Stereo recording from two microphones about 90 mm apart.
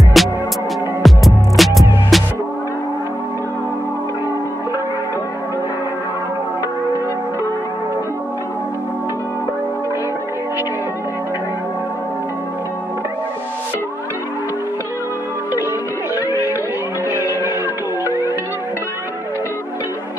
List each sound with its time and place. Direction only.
0.2 s music: centre (ahead or behind)
17.1 s music: 30° right (ahead or behind)